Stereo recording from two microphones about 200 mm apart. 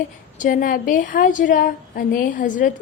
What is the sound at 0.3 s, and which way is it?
A woman's voice, 40° left (ahead or behind).